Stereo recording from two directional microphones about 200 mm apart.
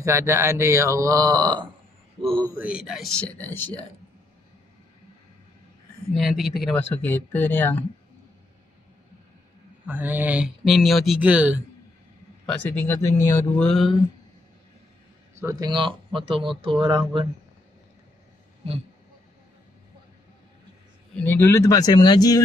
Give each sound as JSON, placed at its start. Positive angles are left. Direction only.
{"t": 0.0, "sound": "speech", "side_deg": -15}
{"t": 2.4, "sound": "speech", "side_deg": -10}
{"t": 6.1, "sound": "speech", "side_deg": 0}
{"t": 9.8, "sound": "speech", "side_deg": -10}
{"t": 12.4, "sound": "speech", "side_deg": 10}
{"t": 15.4, "sound": "speech", "side_deg": -20}
{"t": 18.6, "sound": "speech", "side_deg": -30}
{"t": 21.2, "sound": "speech", "side_deg": 10}